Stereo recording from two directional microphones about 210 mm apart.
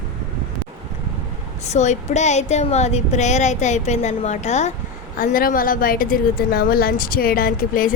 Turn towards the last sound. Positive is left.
turn(degrees=40)  # may be behind; listen again after turning